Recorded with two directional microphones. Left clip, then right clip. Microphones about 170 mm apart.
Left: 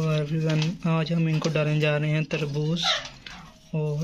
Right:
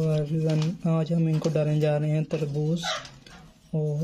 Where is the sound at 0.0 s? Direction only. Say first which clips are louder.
Even; 5° right (ahead or behind).